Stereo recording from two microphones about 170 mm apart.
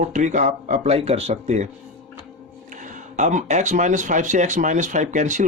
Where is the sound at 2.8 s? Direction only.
45° right (ahead or behind).